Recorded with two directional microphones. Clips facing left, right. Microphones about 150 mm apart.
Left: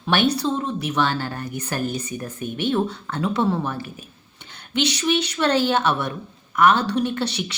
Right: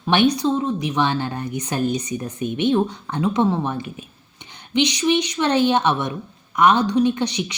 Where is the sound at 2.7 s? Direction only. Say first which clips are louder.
Right 3 dB; 15° right (ahead or behind).